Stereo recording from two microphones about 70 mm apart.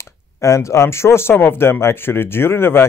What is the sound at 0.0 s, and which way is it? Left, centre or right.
Speech, left.